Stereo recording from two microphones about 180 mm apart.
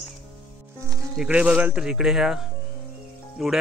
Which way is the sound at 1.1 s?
5° right (ahead or behind).